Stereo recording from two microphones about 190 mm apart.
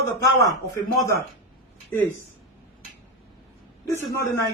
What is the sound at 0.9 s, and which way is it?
Speech, 15° left (ahead or behind).